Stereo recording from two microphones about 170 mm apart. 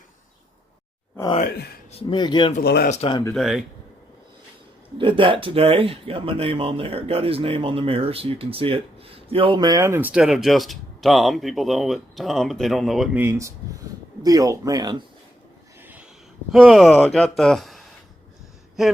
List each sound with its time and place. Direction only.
1.5 s speech: 70° left (ahead or behind)
1.9 s speech: 35° left (ahead or behind)
2.6 s speech: 75° left (ahead or behind)
2.9 s speech: 30° left (ahead or behind)
3.3 s speech: centre (ahead or behind)
4.9 s speech: 30° right (ahead or behind); by 13.1 s centre (ahead or behind)
13.1 s speech: 15° right (ahead or behind)
15.8 s a sound: 10° right (ahead or behind)
16.5 s speech: centre (ahead or behind)